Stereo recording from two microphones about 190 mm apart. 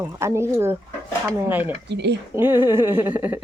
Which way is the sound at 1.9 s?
65° right (ahead or behind).